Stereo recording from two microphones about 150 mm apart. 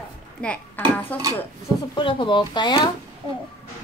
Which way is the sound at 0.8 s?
10° left (ahead or behind).